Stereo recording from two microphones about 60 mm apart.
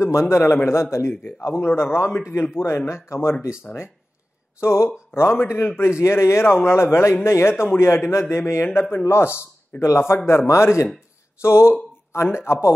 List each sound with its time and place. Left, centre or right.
0.0 s a man's voice: left
4.6 s a man's voice: left